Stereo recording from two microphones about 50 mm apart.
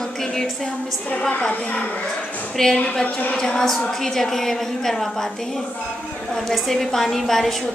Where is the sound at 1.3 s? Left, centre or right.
Left.